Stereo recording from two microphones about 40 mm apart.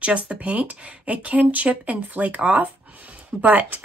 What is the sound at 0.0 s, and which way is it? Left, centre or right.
A woman's voice, right.